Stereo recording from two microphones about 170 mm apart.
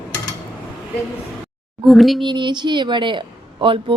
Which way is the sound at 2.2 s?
25° right (ahead or behind).